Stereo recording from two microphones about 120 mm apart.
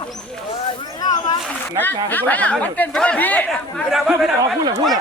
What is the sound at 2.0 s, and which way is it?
A man's voice, 15° left (ahead or behind).